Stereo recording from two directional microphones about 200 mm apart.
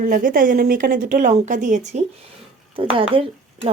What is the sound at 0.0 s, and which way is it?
Speech, 45° right (ahead or behind).